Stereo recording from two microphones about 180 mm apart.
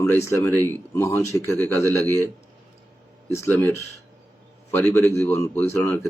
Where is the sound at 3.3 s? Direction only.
15° left (ahead or behind).